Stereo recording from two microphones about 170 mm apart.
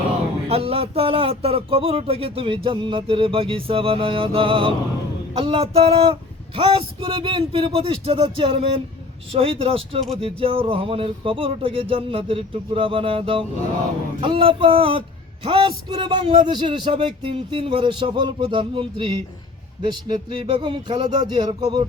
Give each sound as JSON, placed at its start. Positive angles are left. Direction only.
{"t": 0.4, "sound": "speech", "side_deg": -35}